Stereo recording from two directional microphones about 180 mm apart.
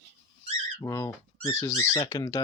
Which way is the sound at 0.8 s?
20° left (ahead or behind).